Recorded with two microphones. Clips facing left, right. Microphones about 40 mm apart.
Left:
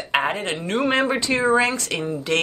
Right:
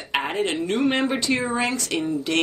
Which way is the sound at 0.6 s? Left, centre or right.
Left.